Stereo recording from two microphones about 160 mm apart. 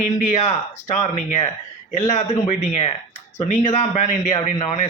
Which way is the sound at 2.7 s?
40° left (ahead or behind).